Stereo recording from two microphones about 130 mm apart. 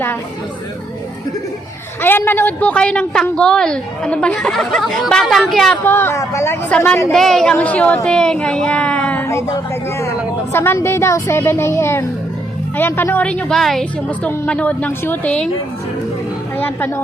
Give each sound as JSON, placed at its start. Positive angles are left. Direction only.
{"t": 2.0, "sound": "a woman's voice", "side_deg": 15}
{"t": 5.8, "sound": "speech", "side_deg": 15}
{"t": 7.1, "sound": "speech", "side_deg": 5}
{"t": 10.5, "sound": "a woman's voice", "side_deg": 15}
{"t": 16.6, "sound": "speech", "side_deg": 15}